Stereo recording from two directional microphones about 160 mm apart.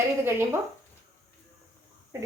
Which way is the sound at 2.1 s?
15° right (ahead or behind).